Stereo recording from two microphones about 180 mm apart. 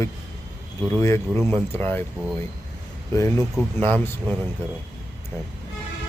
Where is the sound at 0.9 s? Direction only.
15° left (ahead or behind).